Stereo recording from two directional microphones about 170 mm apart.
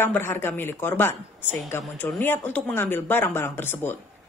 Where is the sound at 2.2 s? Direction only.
10° left (ahead or behind).